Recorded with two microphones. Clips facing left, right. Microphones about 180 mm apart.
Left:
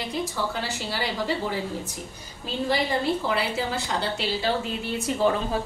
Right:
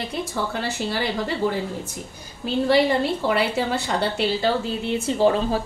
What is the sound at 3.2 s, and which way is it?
Speech, 65° right (ahead or behind).